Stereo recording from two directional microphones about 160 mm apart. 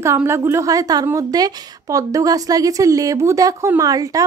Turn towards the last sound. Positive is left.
turn(degrees=-20)  # may be behind; listen again after turning